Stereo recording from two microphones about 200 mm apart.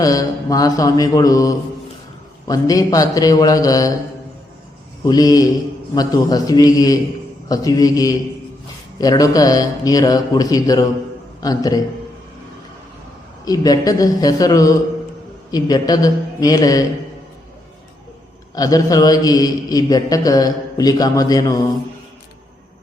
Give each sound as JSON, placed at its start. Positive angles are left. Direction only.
{"t": 0.0, "sound": "a man's voice", "side_deg": 20}
{"t": 5.0, "sound": "a man's voice", "side_deg": 20}
{"t": 13.4, "sound": "a man's voice", "side_deg": 20}
{"t": 18.5, "sound": "a man's voice", "side_deg": 20}